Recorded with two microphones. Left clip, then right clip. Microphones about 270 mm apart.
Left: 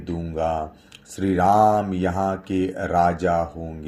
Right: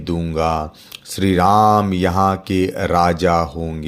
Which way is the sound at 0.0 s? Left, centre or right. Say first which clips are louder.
Right 6 dB; right.